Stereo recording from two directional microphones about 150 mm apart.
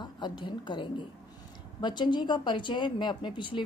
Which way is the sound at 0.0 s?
30° left (ahead or behind).